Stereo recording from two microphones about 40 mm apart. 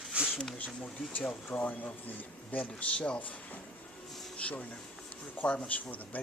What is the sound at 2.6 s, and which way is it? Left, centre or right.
Speech, left.